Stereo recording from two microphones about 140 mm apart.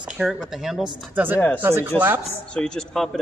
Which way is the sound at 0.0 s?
5° right (ahead or behind).